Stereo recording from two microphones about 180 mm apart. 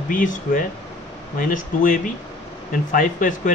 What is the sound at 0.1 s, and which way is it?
Speech, 45° left (ahead or behind).